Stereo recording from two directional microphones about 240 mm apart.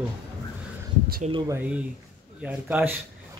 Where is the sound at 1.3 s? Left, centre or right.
Centre.